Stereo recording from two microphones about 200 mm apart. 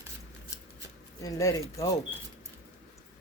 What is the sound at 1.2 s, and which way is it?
Speech, 15° left (ahead or behind).